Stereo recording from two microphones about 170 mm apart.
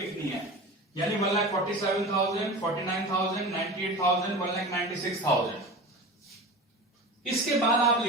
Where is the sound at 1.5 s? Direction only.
20° left (ahead or behind).